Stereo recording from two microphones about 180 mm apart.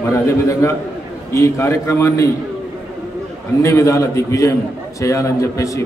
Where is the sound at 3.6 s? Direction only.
15° left (ahead or behind).